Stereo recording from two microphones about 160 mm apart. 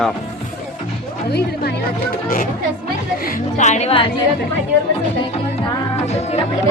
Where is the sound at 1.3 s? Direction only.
90° left.